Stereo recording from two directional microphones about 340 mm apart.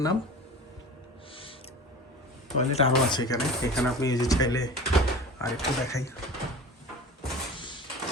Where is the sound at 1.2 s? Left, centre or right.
Centre.